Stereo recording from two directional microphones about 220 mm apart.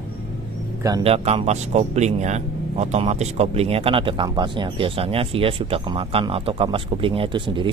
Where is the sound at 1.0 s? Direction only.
25° right (ahead or behind).